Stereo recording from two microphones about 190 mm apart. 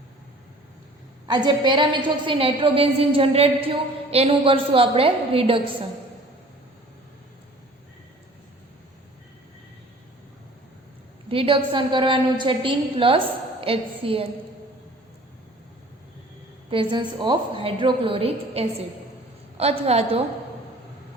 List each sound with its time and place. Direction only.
1.3 s a woman's voice: 25° right (ahead or behind)
11.3 s a woman's voice: 30° right (ahead or behind)
16.6 s a woman's voice: 25° right (ahead or behind)